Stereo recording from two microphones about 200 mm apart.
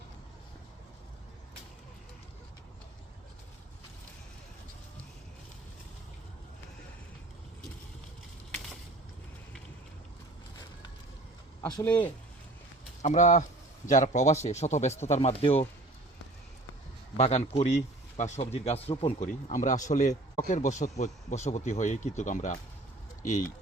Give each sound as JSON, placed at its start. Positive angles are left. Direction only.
{"t": 11.6, "sound": "speech", "side_deg": 10}
{"t": 13.0, "sound": "speech", "side_deg": 35}
{"t": 17.2, "sound": "speech", "side_deg": 35}